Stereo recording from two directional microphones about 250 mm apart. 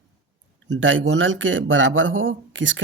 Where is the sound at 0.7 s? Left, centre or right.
Right.